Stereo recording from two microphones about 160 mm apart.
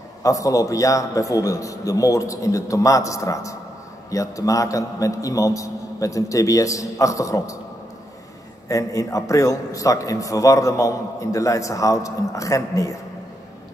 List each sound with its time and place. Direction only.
0.2 s a man's voice: 20° left (ahead or behind)
8.6 s a man's voice: 20° left (ahead or behind)